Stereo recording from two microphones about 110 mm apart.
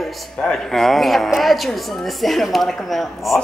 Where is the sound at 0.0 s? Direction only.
5° left (ahead or behind).